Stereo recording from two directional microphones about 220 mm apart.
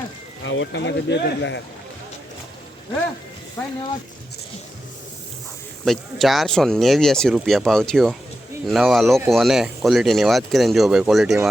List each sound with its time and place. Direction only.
0.4 s speech: 60° left (ahead or behind)
5.8 s speech: centre (ahead or behind)